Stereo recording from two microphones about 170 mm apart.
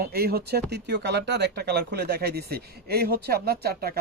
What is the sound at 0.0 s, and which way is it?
Speech, 65° right (ahead or behind).